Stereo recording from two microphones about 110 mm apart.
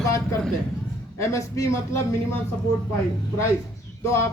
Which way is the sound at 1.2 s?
30° left (ahead or behind).